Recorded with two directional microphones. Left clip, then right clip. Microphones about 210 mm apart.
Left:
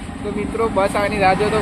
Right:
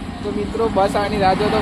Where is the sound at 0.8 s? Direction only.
10° right (ahead or behind).